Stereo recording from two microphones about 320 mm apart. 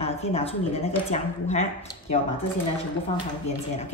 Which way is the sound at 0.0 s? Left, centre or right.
Centre.